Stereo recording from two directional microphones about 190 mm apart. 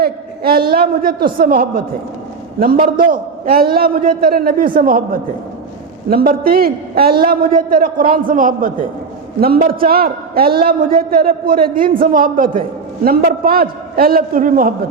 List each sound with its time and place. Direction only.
0.0 s a man's voice: 55° right (ahead or behind)